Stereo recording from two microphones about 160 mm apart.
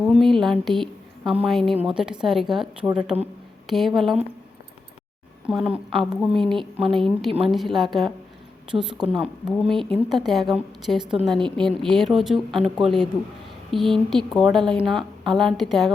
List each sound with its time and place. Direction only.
0.0 s a woman's voice: centre (ahead or behind)
5.5 s a woman's voice: 5° right (ahead or behind)
7.3 s a woman's voice: 35° right (ahead or behind)
7.5 s a woman's voice: centre (ahead or behind)